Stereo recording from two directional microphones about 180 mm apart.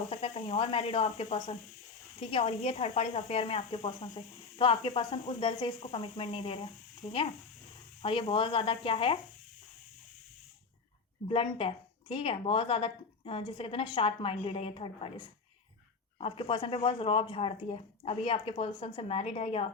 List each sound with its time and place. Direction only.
0.1 s speech: 35° left (ahead or behind)
11.3 s speech: 30° left (ahead or behind)
16.1 s speech: 30° left (ahead or behind)